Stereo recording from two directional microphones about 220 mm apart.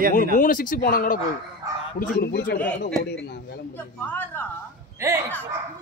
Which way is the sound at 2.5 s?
5° left (ahead or behind).